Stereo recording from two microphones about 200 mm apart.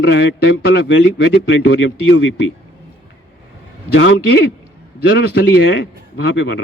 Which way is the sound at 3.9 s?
65° left (ahead or behind).